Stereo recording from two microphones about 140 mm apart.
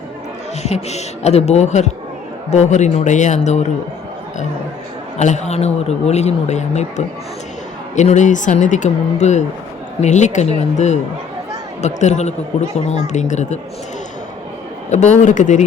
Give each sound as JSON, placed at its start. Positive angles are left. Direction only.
{"t": 0.6, "sound": "speech", "side_deg": 50}
{"t": 5.1, "sound": "speech", "side_deg": 55}
{"t": 14.8, "sound": "speech", "side_deg": 55}